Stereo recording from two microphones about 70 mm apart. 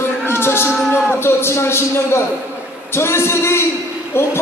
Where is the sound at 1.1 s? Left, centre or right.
Left.